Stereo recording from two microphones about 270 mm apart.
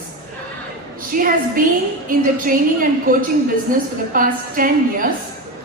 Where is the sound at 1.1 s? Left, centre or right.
Right.